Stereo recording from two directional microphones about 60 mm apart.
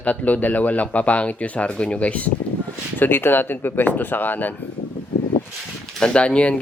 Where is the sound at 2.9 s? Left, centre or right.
Left.